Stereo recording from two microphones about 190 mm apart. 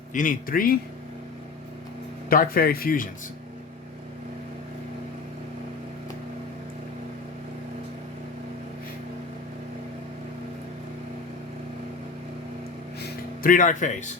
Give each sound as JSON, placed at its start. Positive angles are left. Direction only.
{"t": 0.1, "sound": "speech", "side_deg": 45}
{"t": 2.3, "sound": "speech", "side_deg": 50}
{"t": 13.0, "sound": "music", "side_deg": 55}